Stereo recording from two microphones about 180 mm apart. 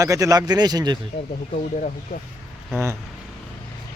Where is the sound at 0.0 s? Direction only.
20° right (ahead or behind).